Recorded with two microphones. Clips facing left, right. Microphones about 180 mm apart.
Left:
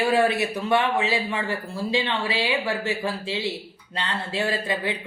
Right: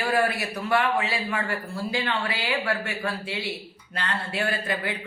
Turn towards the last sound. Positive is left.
turn(degrees=20)  # may be behind; listen again after turning